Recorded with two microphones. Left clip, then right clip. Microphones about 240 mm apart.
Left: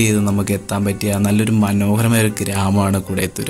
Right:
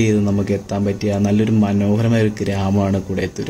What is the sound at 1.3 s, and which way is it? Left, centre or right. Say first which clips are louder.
Speech: right 1 dB; centre.